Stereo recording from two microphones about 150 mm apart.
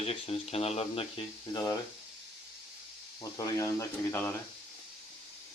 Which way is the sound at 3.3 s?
20° left (ahead or behind).